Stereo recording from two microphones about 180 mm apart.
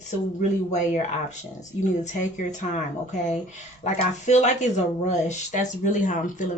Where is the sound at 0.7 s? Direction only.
40° left (ahead or behind).